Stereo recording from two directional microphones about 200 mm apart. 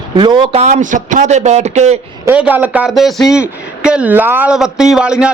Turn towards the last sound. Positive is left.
turn(degrees=-5)  # may be behind; listen again after turning